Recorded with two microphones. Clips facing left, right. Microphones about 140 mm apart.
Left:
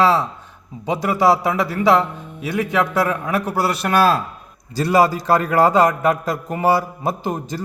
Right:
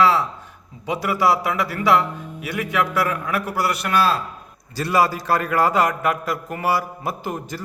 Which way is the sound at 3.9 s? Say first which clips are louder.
Left 4 dB; 45° left (ahead or behind).